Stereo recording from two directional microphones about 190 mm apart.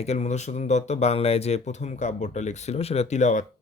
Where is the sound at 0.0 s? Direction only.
35° left (ahead or behind).